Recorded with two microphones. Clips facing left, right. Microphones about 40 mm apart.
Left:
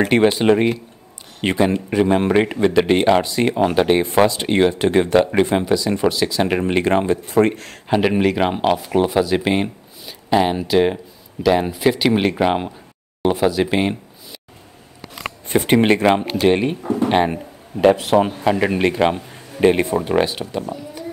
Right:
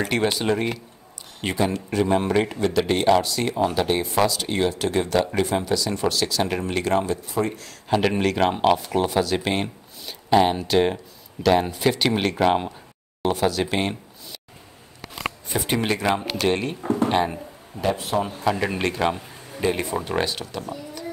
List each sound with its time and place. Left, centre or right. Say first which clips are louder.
0.0 s speech: left 8 dB; left
3.5 s speech: left 6 dB; left
5.7 s speech: left 5 dB; left
6.4 s speech: left 6 dB; left
7.2 s speech: left 9 dB; left
8.1 s speech: left 3 dB; centre
15.4 s speech: left 10 dB; left
17.7 s a man's voice: left 10 dB; left
18.4 s speech: left 6 dB; left
19.5 s speech: left 8 dB; left
20.1 s speech: left 6 dB; centre